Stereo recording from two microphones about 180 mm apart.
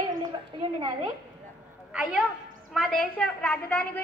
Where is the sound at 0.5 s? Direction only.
25° right (ahead or behind).